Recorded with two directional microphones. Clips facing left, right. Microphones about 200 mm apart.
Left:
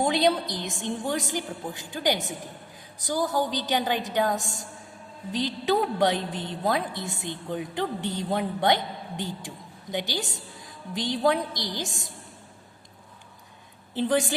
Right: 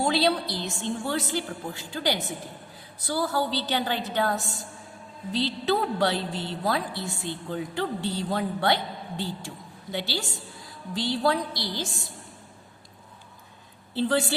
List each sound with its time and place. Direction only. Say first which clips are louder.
0.0 s a woman's voice: left 1 dB; 20° left (ahead or behind)
13.9 s a woman's voice: even; 15° left (ahead or behind)